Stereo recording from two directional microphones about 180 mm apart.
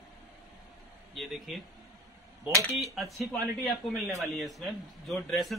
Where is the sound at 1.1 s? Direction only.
Centre (ahead or behind).